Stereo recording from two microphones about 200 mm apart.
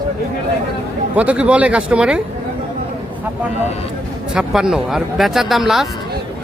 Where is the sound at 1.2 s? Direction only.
5° right (ahead or behind).